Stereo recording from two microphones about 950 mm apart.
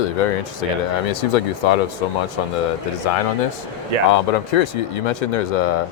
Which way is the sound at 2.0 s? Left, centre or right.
Left.